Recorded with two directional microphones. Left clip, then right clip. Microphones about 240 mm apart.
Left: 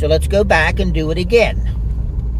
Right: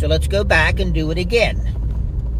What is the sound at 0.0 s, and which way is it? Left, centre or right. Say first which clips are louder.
Speech: left 5 dB; left.